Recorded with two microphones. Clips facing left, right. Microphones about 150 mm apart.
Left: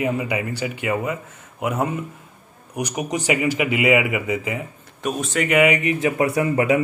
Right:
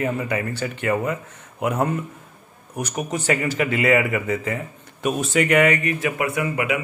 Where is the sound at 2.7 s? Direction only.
15° left (ahead or behind).